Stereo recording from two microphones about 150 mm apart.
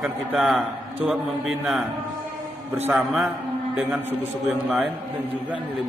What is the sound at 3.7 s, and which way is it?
A man's voice, 10° right (ahead or behind).